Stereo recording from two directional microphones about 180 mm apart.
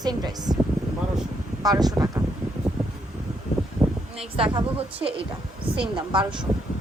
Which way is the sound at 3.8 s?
5° right (ahead or behind).